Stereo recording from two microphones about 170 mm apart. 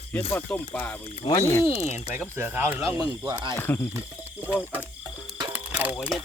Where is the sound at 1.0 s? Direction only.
30° left (ahead or behind).